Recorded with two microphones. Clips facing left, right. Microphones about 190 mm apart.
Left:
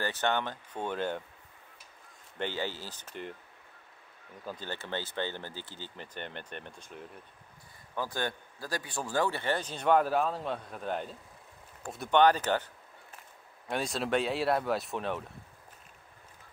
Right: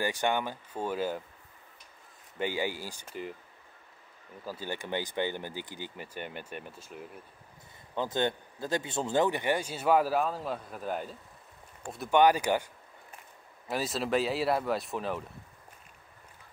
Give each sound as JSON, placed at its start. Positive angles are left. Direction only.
{"t": 0.0, "sound": "a man's voice", "side_deg": -10}
{"t": 2.3, "sound": "a man's voice", "side_deg": -10}
{"t": 4.5, "sound": "a man's voice", "side_deg": -10}
{"t": 7.9, "sound": "a man's voice", "side_deg": -20}
{"t": 13.7, "sound": "speech", "side_deg": 0}